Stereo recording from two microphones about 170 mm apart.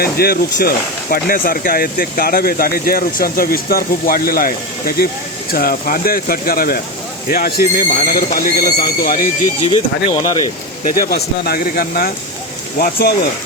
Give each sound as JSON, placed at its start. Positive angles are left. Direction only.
{"t": 0.0, "sound": "speech", "side_deg": 65}
{"t": 9.6, "sound": "speech", "side_deg": 30}
{"t": 10.8, "sound": "speech", "side_deg": 55}